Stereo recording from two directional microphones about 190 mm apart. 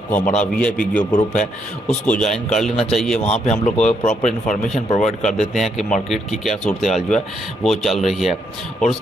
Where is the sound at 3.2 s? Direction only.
35° left (ahead or behind).